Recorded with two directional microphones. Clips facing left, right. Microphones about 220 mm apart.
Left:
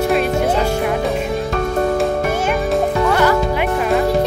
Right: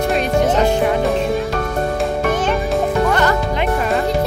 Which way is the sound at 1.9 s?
5° left (ahead or behind).